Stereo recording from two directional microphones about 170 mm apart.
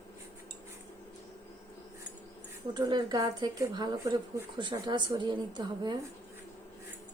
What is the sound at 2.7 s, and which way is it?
Speech, 25° right (ahead or behind).